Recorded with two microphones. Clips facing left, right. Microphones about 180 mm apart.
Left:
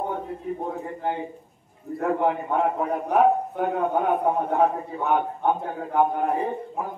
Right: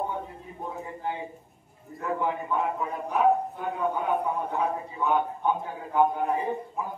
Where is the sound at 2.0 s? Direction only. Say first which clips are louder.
Left 6 dB; 60° left (ahead or behind).